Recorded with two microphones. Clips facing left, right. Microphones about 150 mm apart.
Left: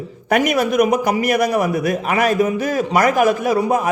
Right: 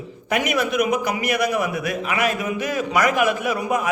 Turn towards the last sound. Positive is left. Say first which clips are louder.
# left 6 dB
turn(degrees=35)  # may be behind; listen again after turning